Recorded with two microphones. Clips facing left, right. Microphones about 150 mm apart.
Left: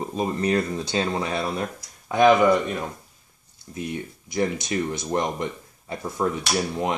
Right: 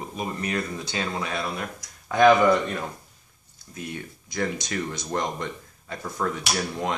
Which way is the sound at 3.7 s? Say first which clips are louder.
Left 5 dB; 25° left (ahead or behind).